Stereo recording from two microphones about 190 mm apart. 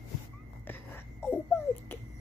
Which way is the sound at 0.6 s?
10° left (ahead or behind).